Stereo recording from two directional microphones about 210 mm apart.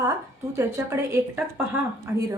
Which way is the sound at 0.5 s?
10° right (ahead or behind).